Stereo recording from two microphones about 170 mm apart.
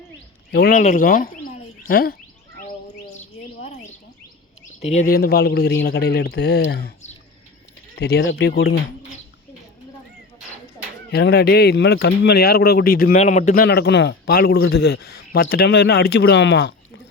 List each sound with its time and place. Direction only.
0.5 s a man's voice: 70° left (ahead or behind)
0.8 s speech: 50° left (ahead or behind)
2.6 s bird: 50° left (ahead or behind)
4.7 s a sound: 40° left (ahead or behind)
5.0 s a man's voice: 65° left (ahead or behind)
7.9 s a man's voice: 75° left (ahead or behind)
11.1 s a man's voice: 70° left (ahead or behind)
13.1 s a man's voice: 45° left (ahead or behind); by 16.7 s 90° left